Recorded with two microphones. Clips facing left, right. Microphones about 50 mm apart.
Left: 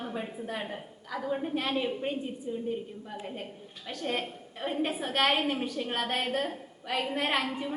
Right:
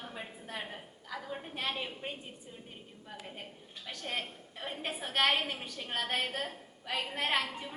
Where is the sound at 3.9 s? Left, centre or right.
Centre.